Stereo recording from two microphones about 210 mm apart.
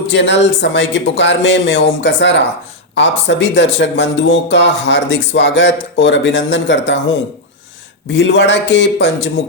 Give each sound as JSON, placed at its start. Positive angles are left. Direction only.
{"t": 0.1, "sound": "speech", "side_deg": 55}
{"t": 8.1, "sound": "speech", "side_deg": 60}